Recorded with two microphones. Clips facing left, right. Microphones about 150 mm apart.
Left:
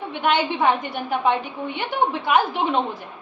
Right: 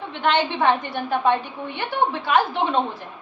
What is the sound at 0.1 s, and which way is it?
A woman's voice, 10° left (ahead or behind).